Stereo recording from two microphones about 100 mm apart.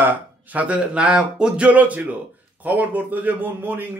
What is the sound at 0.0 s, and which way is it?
A man's voice, 20° right (ahead or behind).